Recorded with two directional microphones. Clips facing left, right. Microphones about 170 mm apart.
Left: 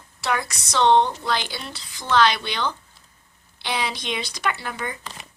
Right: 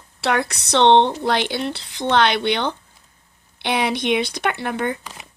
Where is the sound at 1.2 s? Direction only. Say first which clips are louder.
Right 6 dB; 60° right (ahead or behind).